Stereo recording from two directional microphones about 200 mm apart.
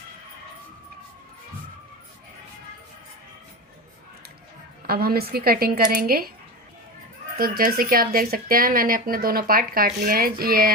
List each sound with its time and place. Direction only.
4.9 s speech: 50° right (ahead or behind)
7.3 s speech: 45° right (ahead or behind)